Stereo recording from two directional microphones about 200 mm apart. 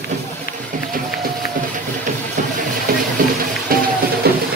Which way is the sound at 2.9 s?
45° right (ahead or behind).